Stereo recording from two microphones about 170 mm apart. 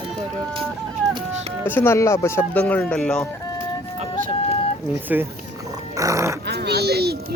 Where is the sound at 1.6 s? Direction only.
15° left (ahead or behind).